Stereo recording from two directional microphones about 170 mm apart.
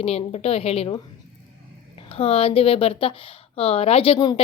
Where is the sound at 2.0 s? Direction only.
35° left (ahead or behind).